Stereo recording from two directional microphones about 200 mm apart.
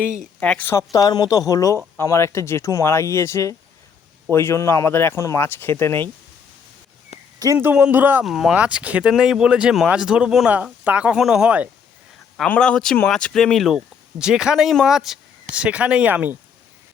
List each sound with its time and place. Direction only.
0.3 s speech: 5° left (ahead or behind)
7.3 s speech: 15° right (ahead or behind)
12.4 s speech: 5° left (ahead or behind)